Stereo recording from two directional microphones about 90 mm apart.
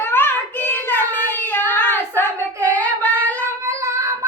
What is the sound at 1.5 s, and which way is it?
Child singing, 20° left (ahead or behind).